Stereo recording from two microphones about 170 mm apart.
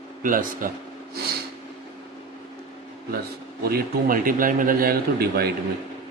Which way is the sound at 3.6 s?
65° right (ahead or behind).